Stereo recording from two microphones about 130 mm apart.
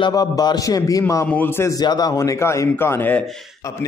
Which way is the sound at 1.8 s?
30° left (ahead or behind).